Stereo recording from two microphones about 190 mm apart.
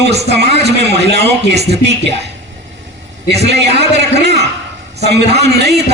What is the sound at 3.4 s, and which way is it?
Speech, 60° right (ahead or behind).